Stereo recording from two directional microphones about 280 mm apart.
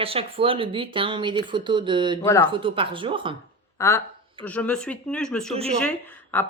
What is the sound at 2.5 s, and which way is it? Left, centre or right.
Speech, centre.